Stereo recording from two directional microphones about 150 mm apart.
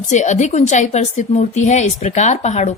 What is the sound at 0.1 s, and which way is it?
Speech, 50° left (ahead or behind).